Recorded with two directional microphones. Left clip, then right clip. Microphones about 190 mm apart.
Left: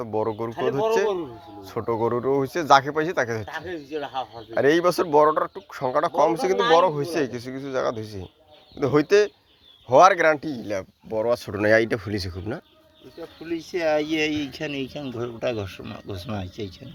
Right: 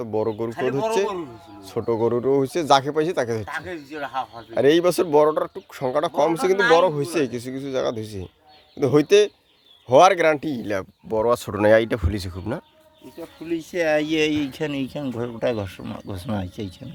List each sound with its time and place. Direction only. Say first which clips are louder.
0.0 s speech: right 2 dB; 35° right (ahead or behind)
11.6 s speech: right 3 dB; 20° right (ahead or behind)
13.4 s speech: right 2 dB; 50° right (ahead or behind)